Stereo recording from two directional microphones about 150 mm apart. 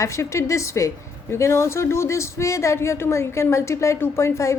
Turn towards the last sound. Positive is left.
turn(degrees=20)  # may be behind; listen again after turning